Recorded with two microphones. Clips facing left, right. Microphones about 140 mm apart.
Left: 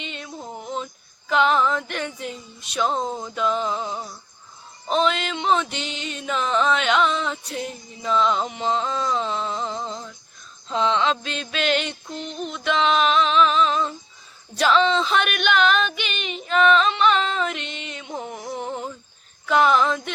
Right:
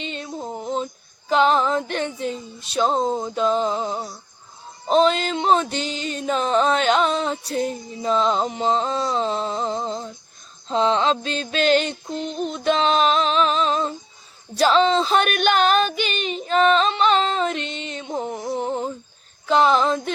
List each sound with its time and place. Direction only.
0.0 s a sound: 35° right (ahead or behind)
1.3 s music: 35° right (ahead or behind)
14.5 s female singing: 35° right (ahead or behind)